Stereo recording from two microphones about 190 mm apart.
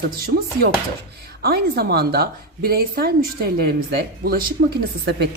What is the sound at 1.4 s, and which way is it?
A woman's voice, 55° right (ahead or behind).